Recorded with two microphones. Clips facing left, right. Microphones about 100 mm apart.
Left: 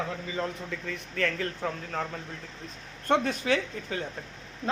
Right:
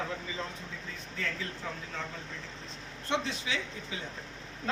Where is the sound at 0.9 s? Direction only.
65° left (ahead or behind).